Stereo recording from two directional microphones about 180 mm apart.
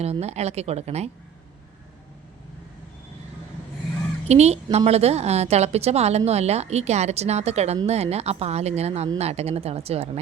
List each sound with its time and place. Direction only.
0.0 s a woman's voice: 35° right (ahead or behind)
4.3 s a woman's voice: 35° right (ahead or behind)